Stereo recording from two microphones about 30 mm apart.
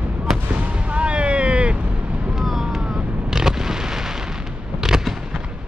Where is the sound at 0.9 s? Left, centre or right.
Right.